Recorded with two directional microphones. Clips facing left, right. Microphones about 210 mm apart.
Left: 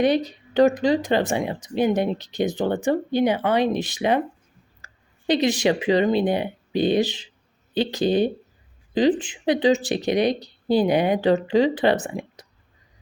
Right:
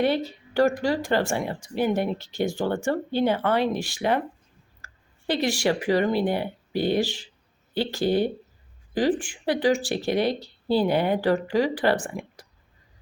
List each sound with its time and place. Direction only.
0.0 s speech: 15° left (ahead or behind)